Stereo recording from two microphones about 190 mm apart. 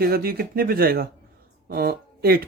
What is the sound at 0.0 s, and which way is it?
Speech, 50° right (ahead or behind).